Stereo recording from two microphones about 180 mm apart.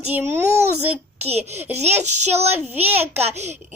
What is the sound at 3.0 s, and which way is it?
Speech, 35° right (ahead or behind).